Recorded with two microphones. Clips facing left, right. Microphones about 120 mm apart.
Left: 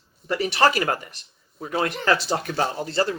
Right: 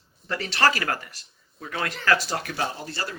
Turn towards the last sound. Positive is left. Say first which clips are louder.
# left 7 dB
turn(degrees=30)  # may be behind; listen again after turning